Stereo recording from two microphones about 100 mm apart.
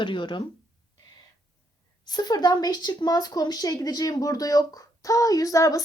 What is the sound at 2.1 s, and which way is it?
Speech, 40° left (ahead or behind).